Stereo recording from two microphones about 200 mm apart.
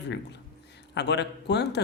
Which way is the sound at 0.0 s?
60° left (ahead or behind).